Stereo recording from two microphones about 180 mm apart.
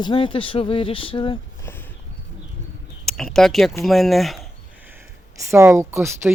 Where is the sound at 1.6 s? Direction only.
10° left (ahead or behind).